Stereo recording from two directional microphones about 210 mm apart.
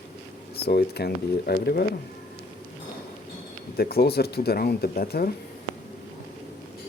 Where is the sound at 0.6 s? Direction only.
50° left (ahead or behind).